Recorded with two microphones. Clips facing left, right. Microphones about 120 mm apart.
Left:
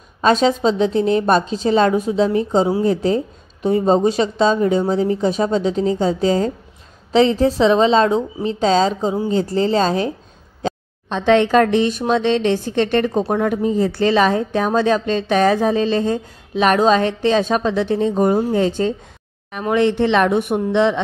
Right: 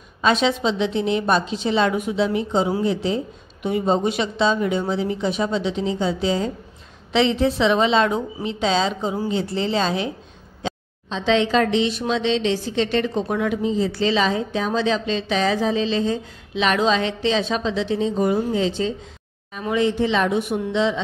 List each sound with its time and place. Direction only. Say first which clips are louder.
0.2 s a woman's voice: left 4 dB; 40° left (ahead or behind)
10.6 s a woman's voice: left 5 dB; 55° left (ahead or behind)
19.6 s speech: left 4 dB; 60° left (ahead or behind)